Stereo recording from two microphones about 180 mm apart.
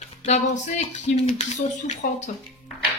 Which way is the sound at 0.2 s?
40° left (ahead or behind).